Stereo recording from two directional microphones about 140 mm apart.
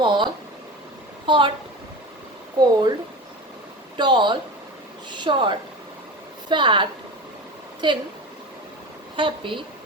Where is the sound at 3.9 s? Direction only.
35° right (ahead or behind).